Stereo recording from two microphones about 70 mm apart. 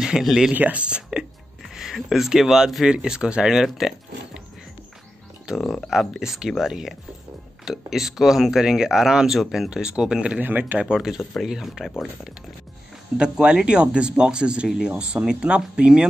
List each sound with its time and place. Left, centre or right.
0.0 s speech: centre
0.5 s speech: right
5.5 s speech: centre
10.4 s speech: right
10.8 s speech: centre
13.2 s speech: centre